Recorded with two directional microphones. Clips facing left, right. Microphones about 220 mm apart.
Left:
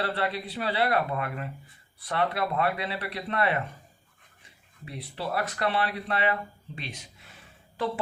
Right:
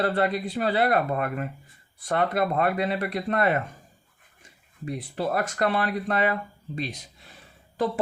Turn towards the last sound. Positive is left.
turn(degrees=-40)  # may be behind; listen again after turning